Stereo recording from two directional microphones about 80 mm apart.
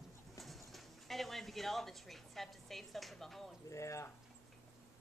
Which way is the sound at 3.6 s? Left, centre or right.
Left.